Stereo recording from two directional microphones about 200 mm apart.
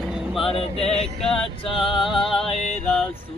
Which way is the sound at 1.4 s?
25° left (ahead or behind).